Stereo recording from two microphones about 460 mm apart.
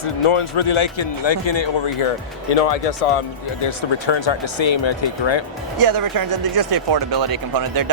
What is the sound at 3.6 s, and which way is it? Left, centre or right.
Speech, left.